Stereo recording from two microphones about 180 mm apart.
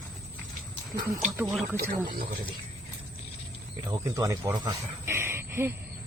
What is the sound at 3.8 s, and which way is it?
Speech, 20° right (ahead or behind).